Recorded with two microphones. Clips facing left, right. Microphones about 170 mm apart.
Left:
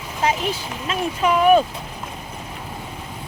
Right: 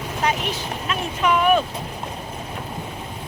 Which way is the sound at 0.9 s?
30° left (ahead or behind).